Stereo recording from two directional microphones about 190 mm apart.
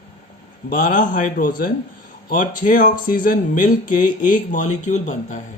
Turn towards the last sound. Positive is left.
turn(degrees=40)  # may be behind; listen again after turning